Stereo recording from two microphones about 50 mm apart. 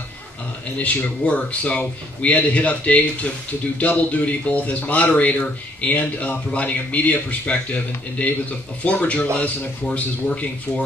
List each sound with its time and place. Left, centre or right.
0.7 s speech: left